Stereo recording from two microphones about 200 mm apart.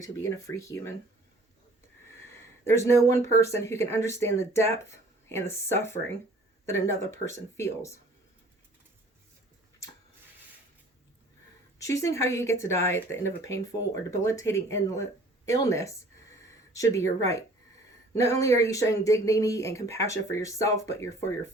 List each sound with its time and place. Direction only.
0.0 s speech: 15° left (ahead or behind)
2.1 s a sound: 10° left (ahead or behind)
3.3 s speech: 15° left (ahead or behind)
11.8 s speech: 15° left (ahead or behind)
18.1 s speech: 15° left (ahead or behind)